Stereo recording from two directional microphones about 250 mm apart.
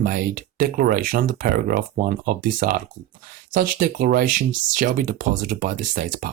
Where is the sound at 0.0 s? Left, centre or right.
Right.